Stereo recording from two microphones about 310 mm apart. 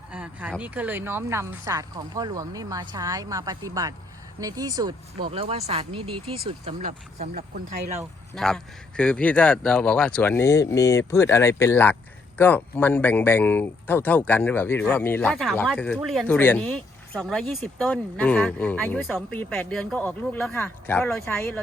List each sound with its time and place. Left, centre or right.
0.1 s speech: centre; by 7.4 s right
7.9 s speech: centre